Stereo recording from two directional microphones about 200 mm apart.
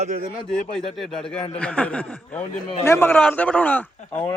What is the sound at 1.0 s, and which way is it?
A man's voice, centre (ahead or behind).